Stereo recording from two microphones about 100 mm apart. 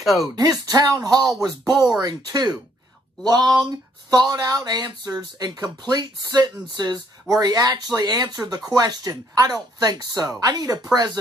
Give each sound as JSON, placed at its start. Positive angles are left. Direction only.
{"t": 0.0, "sound": "speech", "side_deg": 0}
{"t": 0.4, "sound": "speech", "side_deg": -40}